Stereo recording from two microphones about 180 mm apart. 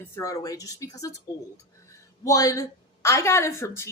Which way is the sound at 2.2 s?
20° left (ahead or behind).